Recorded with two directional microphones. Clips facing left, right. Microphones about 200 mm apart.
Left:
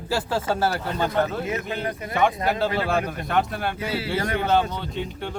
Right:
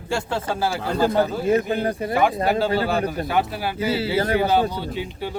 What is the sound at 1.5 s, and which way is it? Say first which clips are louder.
Speech: right 8 dB; 35° right (ahead or behind).